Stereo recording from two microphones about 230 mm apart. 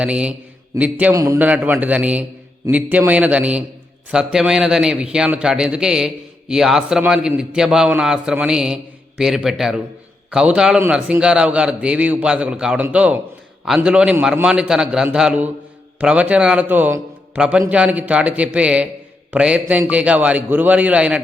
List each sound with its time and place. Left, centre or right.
0.0 s a man's voice: centre